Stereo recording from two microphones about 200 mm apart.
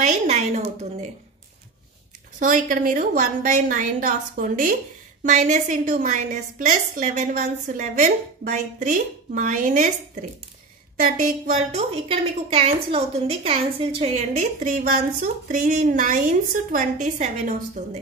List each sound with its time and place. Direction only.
0.0 s a sound: 35° right (ahead or behind)
2.3 s a woman's voice: 40° right (ahead or behind)
11.0 s a woman's voice: 45° right (ahead or behind)